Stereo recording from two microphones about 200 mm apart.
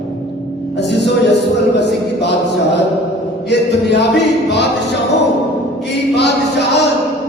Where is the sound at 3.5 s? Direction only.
60° left (ahead or behind).